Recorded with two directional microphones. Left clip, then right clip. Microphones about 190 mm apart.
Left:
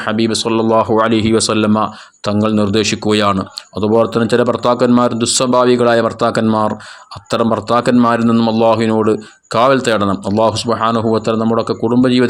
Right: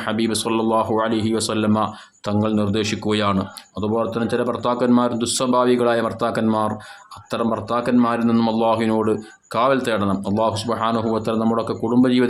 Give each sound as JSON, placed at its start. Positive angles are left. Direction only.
{"t": 0.0, "sound": "speech", "side_deg": 25}